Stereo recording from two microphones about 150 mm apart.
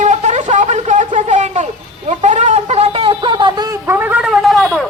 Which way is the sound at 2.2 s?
55° right (ahead or behind).